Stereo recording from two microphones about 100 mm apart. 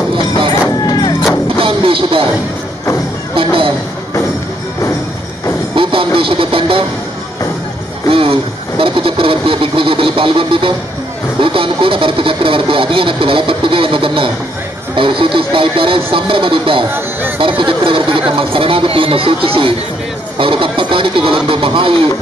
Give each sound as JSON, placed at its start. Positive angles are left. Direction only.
{"t": 0.8, "sound": "music", "side_deg": 45}
{"t": 1.6, "sound": "music", "side_deg": -60}
{"t": 3.3, "sound": "music", "side_deg": -65}
{"t": 5.8, "sound": "music", "side_deg": -60}
{"t": 8.1, "sound": "a sound", "side_deg": -65}
{"t": 11.4, "sound": "speech", "side_deg": -60}